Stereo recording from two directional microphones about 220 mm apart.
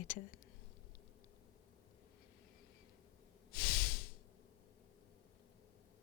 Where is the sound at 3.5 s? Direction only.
40° left (ahead or behind).